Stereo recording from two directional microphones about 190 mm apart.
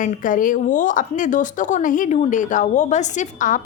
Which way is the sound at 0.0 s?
45° left (ahead or behind).